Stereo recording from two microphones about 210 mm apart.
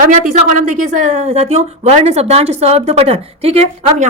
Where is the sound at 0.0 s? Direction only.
35° right (ahead or behind).